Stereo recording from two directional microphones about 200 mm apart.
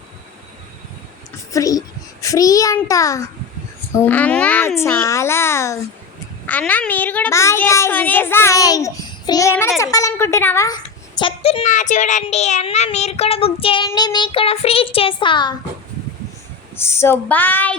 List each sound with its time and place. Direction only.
1.5 s a child's voice: 15° left (ahead or behind)
11.6 s speech: 40° left (ahead or behind)
16.7 s a child's voice: 10° left (ahead or behind)